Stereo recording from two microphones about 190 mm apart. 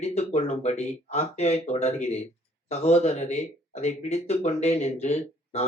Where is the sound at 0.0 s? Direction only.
35° left (ahead or behind).